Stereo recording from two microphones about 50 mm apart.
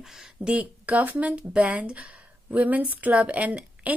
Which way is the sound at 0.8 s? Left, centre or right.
Right.